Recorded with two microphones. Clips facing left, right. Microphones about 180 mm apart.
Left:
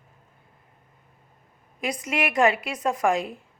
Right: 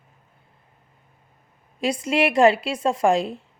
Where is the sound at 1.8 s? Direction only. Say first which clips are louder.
Right 6 dB; 30° right (ahead or behind).